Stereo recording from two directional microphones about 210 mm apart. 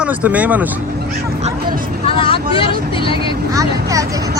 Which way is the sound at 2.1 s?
25° left (ahead or behind).